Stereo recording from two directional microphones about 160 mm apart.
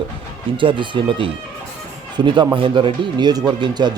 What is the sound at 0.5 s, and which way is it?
Speech, 30° right (ahead or behind).